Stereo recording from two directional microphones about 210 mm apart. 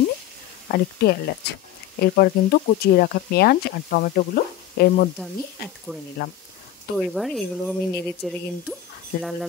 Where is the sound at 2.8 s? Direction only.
45° left (ahead or behind).